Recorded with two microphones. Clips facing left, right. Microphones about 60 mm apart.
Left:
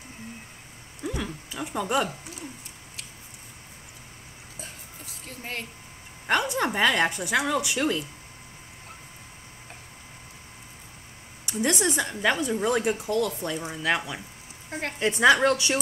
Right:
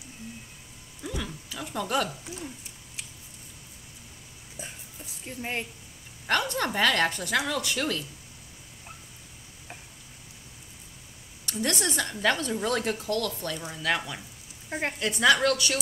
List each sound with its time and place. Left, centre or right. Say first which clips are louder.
1.0 s a sound: left 3 dB; centre
1.6 s speech: left 2 dB; centre
5.2 s a woman's voice: right 3 dB; centre
6.2 s speech: left 2 dB; centre
11.4 s speech: left 4 dB; centre
14.7 s speech: right 2 dB; right
15.0 s speech: left 4 dB; left